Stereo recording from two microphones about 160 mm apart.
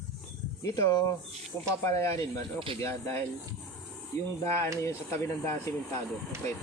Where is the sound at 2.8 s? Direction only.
15° left (ahead or behind).